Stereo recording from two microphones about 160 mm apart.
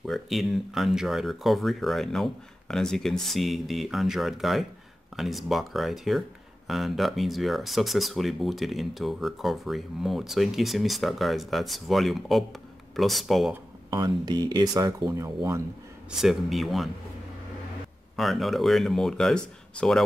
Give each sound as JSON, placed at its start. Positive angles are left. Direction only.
{"t": 0.0, "sound": "speech", "side_deg": 0}
{"t": 13.8, "sound": "speech", "side_deg": -25}
{"t": 16.1, "sound": "speech", "side_deg": 0}
{"t": 18.1, "sound": "speech", "side_deg": 0}